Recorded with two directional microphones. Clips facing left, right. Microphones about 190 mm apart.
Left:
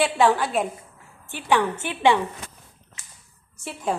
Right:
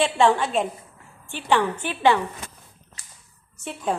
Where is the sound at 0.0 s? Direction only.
Centre (ahead or behind).